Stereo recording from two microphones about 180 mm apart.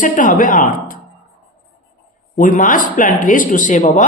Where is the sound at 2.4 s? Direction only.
50° left (ahead or behind).